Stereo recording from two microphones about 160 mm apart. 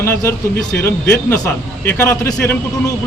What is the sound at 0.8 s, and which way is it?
A man's voice, 15° left (ahead or behind).